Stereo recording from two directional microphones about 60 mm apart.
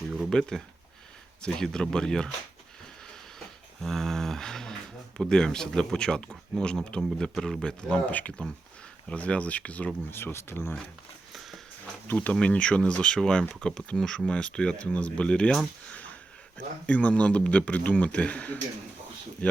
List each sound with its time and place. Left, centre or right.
0.3 s speech: centre
3.8 s a man's voice: centre; by 9.9 s left
10.1 s speech: left
11.3 s a sound: centre
12.1 s a man's voice: left
16.8 s a man's voice: left